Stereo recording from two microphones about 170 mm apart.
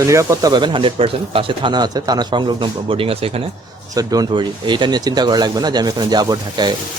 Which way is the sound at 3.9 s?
20° right (ahead or behind).